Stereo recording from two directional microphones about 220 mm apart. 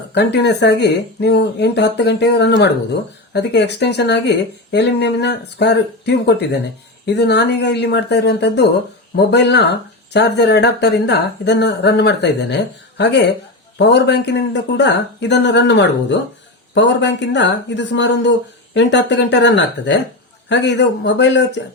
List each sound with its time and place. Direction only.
0.1 s speech: 50° left (ahead or behind)